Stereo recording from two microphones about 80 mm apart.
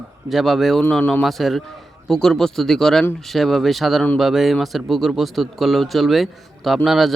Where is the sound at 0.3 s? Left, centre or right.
Centre.